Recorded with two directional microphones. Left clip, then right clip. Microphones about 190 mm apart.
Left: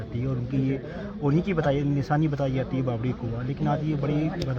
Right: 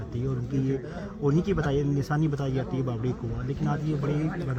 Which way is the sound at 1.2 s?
35° left (ahead or behind).